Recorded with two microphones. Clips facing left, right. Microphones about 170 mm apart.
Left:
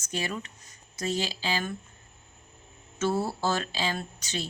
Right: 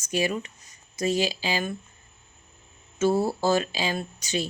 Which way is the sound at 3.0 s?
15° right (ahead or behind).